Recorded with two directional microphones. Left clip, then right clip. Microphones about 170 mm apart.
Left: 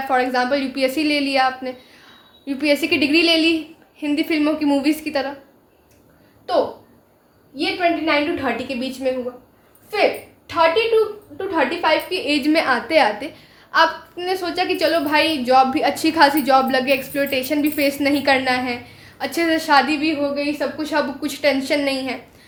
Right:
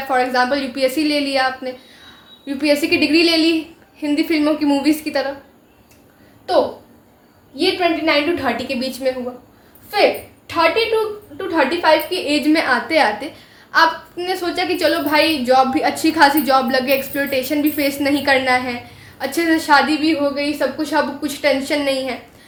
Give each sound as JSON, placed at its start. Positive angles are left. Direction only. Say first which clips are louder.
{"t": 0.1, "sound": "a woman's voice", "louder": "right 2 dB", "side_deg": 20}
{"t": 7.5, "sound": "a woman's voice", "louder": "right 2 dB", "side_deg": 15}
{"t": 11.3, "sound": "a woman's voice", "louder": "right 2 dB", "side_deg": 20}